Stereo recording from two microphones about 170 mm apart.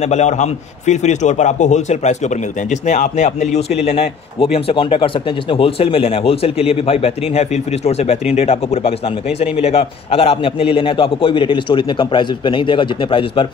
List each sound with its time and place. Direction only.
0.1 s a man's voice: 40° left (ahead or behind)